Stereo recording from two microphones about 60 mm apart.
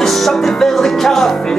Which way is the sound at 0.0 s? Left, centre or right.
Centre.